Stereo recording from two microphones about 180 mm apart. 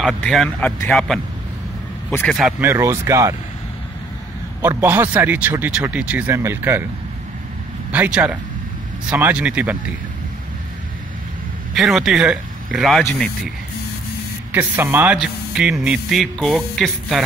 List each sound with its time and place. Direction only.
0.0 s a man's voice: centre (ahead or behind)
2.6 s speech: 15° right (ahead or behind)
4.6 s speech: 15° right (ahead or behind)
7.9 s speech: 10° right (ahead or behind)
11.7 s speech: centre (ahead or behind)
14.5 s speech: 10° right (ahead or behind)